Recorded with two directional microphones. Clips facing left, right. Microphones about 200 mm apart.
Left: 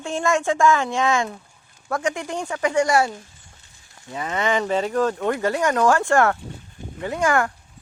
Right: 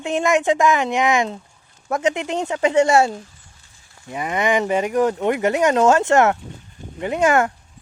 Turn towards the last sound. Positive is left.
turn(degrees=-20)  # may be behind; listen again after turning